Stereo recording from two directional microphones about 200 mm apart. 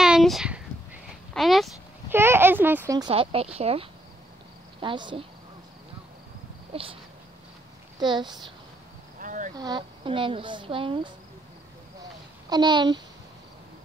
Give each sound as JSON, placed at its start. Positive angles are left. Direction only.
{"t": 0.0, "sound": "a sound", "side_deg": 0}
{"t": 1.3, "sound": "speech", "side_deg": 0}
{"t": 2.0, "sound": "speech", "side_deg": -10}
{"t": 3.1, "sound": "a woman's voice", "side_deg": -30}
{"t": 6.7, "sound": "a sound", "side_deg": -25}
{"t": 8.0, "sound": "speech", "side_deg": -20}
{"t": 9.2, "sound": "insect", "side_deg": -40}
{"t": 9.6, "sound": "speech", "side_deg": -20}
{"t": 12.4, "sound": "speech", "side_deg": -20}